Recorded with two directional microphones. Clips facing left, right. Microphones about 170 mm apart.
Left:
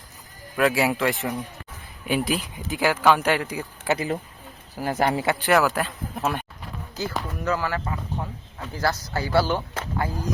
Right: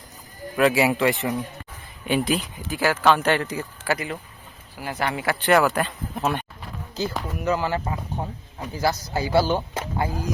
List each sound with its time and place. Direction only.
0.5 s speech: centre (ahead or behind)
2.6 s speech: 20° left (ahead or behind)
3.9 s speech: 35° left (ahead or behind)
4.7 s speech: 45° left (ahead or behind)
5.4 s speech: centre (ahead or behind)
6.9 s speech: 20° right (ahead or behind)